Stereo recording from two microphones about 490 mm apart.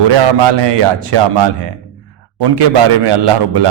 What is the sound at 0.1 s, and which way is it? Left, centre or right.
A man's voice, right.